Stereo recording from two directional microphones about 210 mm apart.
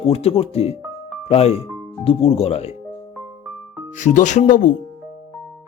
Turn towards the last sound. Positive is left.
turn(degrees=35)  # may be behind; listen again after turning